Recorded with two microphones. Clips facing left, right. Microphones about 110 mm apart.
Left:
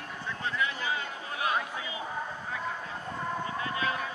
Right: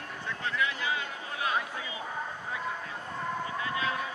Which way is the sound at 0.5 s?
35° left (ahead or behind).